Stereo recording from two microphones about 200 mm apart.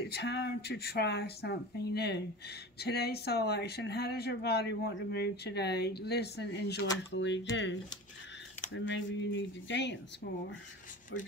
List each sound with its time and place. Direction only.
0.1 s speech: 55° left (ahead or behind)
8.7 s speech: 65° left (ahead or behind)